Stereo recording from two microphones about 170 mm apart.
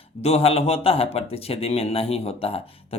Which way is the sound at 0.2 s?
40° left (ahead or behind).